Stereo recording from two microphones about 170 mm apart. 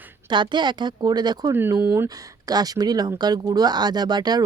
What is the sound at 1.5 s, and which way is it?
Speech, 15° right (ahead or behind).